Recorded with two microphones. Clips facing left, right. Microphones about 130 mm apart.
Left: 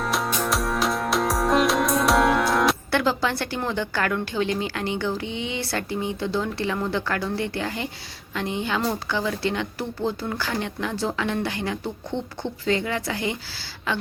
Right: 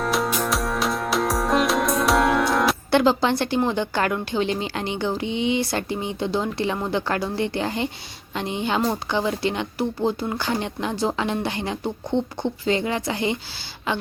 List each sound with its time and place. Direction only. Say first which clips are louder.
0.0 s music: right 2 dB; centre (ahead or behind)
2.9 s a woman's voice: right 4 dB; 20° right (ahead or behind)